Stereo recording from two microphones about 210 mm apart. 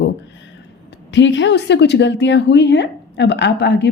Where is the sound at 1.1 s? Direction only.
60° left (ahead or behind).